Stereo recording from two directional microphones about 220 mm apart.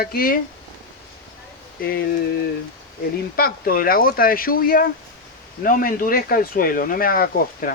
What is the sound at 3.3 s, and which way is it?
Speech, 40° left (ahead or behind).